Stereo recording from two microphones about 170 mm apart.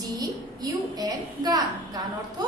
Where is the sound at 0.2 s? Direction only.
20° right (ahead or behind).